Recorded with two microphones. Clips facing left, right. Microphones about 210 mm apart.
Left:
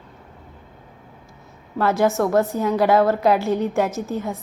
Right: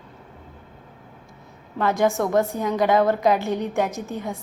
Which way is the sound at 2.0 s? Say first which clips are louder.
Left 2 dB; 15° right (ahead or behind).